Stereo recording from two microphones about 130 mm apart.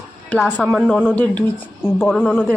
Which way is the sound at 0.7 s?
10° right (ahead or behind).